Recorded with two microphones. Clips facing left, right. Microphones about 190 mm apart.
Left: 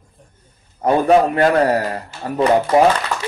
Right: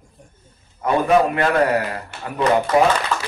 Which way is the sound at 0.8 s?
35° left (ahead or behind).